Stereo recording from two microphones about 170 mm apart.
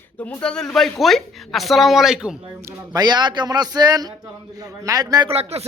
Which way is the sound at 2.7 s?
25° right (ahead or behind).